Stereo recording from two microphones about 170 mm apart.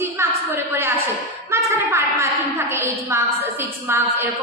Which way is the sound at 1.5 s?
15° right (ahead or behind).